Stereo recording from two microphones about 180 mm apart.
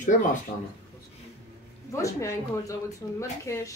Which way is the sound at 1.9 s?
15° left (ahead or behind).